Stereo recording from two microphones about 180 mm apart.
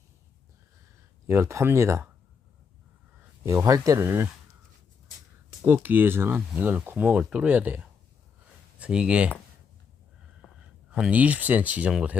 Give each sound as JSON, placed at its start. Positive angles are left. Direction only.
{"t": 1.3, "sound": "speech", "side_deg": -15}
{"t": 3.4, "sound": "speech", "side_deg": -15}
{"t": 5.6, "sound": "speech", "side_deg": -10}
{"t": 10.9, "sound": "speech", "side_deg": -5}